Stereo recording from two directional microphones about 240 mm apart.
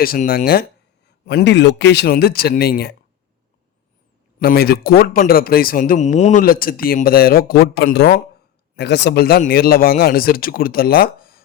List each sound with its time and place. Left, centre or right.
0.0 s speech: left
4.4 s speech: left